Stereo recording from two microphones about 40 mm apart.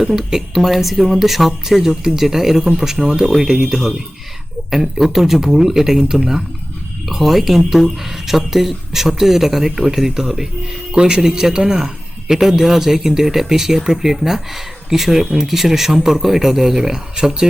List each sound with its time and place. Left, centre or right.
0.0 s speech: centre